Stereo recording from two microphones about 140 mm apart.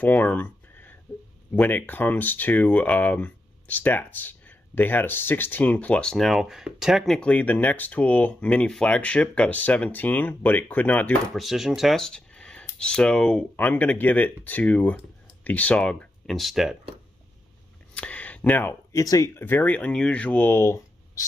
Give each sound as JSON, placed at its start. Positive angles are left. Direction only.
{"t": 0.0, "sound": "a sound", "side_deg": 10}
{"t": 1.5, "sound": "speech", "side_deg": 15}
{"t": 7.2, "sound": "speech", "side_deg": 10}
{"t": 11.3, "sound": "speech", "side_deg": 0}
{"t": 17.9, "sound": "speech", "side_deg": 10}